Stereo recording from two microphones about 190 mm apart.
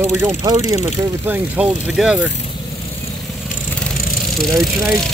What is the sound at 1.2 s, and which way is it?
Speech, 5° right (ahead or behind).